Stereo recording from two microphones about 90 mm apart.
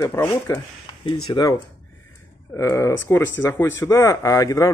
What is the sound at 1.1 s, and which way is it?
Speech, 60° left (ahead or behind).